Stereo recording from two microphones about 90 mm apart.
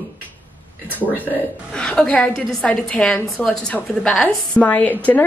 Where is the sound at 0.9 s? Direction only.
20° left (ahead or behind).